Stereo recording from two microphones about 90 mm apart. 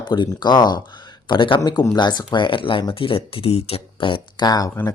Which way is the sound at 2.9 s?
85° left.